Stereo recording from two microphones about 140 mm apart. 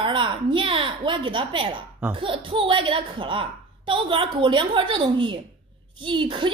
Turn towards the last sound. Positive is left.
turn(degrees=-35)  # may be behind; listen again after turning